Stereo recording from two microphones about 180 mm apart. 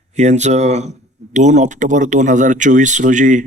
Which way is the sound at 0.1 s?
40° right (ahead or behind).